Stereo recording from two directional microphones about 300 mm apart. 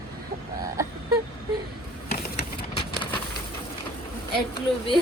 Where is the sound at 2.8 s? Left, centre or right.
Centre.